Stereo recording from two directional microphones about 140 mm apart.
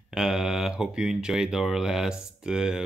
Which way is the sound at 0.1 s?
5° right (ahead or behind).